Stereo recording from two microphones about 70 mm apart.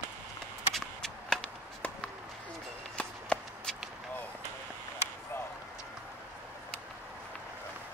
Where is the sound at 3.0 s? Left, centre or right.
Centre.